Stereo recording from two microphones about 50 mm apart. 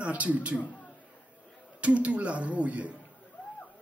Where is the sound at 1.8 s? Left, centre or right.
Right.